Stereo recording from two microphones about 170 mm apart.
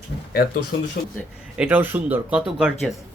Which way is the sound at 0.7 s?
90° left.